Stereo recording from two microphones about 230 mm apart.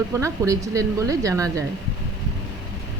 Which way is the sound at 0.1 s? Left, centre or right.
Centre.